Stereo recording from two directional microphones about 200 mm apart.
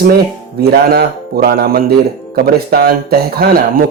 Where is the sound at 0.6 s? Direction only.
50° right (ahead or behind).